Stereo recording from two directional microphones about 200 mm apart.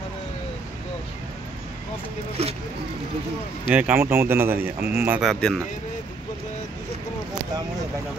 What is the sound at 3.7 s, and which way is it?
Speech, 10° right (ahead or behind).